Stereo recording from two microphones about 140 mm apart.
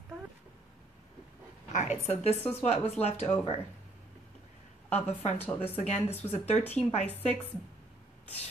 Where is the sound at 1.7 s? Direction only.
55° left (ahead or behind).